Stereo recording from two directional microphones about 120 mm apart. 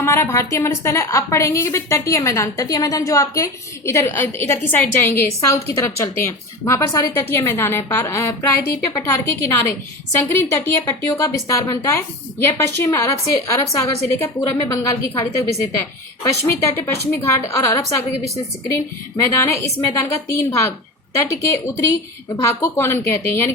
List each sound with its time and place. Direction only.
0.0 s a woman's voice: 20° left (ahead or behind)
16.5 s a woman's voice: 20° left (ahead or behind)